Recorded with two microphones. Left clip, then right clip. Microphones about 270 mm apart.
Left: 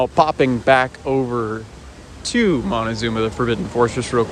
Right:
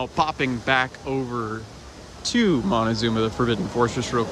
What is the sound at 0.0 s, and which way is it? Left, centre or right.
Speech, centre.